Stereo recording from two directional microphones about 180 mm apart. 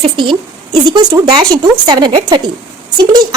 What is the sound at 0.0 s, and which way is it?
A woman's voice, 25° right (ahead or behind).